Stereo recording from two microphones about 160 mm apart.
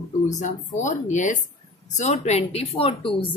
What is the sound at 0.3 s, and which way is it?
A woman's voice, 50° left (ahead or behind).